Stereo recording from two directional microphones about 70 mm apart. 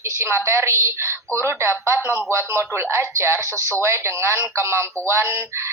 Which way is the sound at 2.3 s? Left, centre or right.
Right.